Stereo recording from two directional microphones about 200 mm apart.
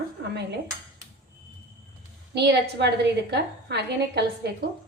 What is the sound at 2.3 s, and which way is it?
A woman's voice, 60° right (ahead or behind).